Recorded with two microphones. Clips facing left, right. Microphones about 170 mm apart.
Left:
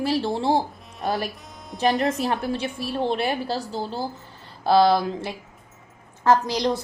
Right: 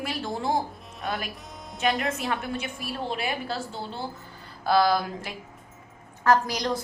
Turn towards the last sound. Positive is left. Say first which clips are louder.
# left 3 dB
turn(degrees=25)  # may be behind; listen again after turning